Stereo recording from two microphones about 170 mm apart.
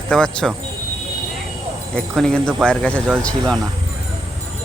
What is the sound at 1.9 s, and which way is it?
Speech, 5° left (ahead or behind).